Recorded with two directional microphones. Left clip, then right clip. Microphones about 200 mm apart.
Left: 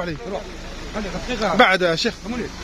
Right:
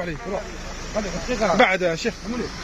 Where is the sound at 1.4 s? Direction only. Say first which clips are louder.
Left 2 dB; 20° left (ahead or behind).